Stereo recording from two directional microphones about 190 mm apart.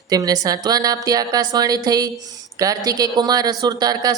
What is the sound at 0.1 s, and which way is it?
A woman's voice, 20° right (ahead or behind).